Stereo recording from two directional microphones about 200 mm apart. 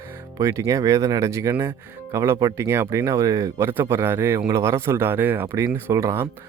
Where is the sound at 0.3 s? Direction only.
15° right (ahead or behind).